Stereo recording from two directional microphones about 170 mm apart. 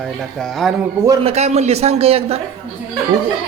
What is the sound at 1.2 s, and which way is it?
A man's voice, 40° right (ahead or behind).